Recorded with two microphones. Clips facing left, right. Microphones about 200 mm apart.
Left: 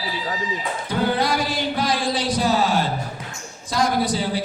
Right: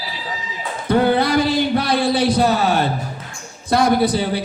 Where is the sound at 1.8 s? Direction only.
60° right (ahead or behind).